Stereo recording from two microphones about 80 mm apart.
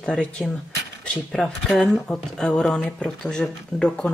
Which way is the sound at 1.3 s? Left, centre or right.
Centre.